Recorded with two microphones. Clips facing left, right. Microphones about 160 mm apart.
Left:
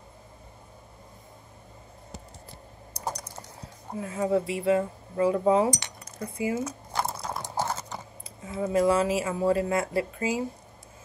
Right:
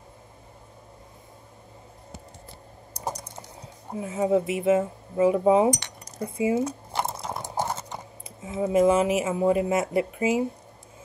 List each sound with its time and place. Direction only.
3.0 s typing: 20° right (ahead or behind)
4.0 s speech: 20° right (ahead or behind)
6.2 s a sound: 25° right (ahead or behind)
7.5 s clip-clop: 20° right (ahead or behind)
8.5 s speech: 20° right (ahead or behind)